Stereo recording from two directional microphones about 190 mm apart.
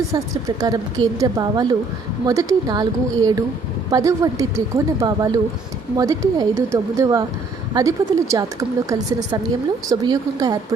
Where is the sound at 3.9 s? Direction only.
15° right (ahead or behind).